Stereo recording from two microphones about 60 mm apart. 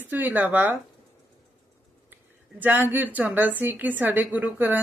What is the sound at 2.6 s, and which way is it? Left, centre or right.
Speech, right.